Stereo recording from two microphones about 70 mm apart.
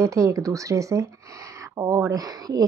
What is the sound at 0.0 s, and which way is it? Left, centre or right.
A woman's voice, right.